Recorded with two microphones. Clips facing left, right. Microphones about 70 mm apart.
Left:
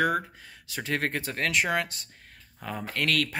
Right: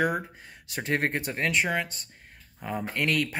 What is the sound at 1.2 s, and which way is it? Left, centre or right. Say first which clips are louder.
Speech: right 1 dB; centre.